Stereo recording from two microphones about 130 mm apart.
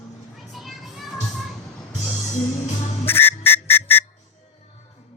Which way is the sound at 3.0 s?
15° left (ahead or behind).